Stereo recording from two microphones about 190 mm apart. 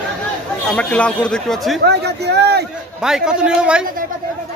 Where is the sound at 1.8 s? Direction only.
60° right (ahead or behind).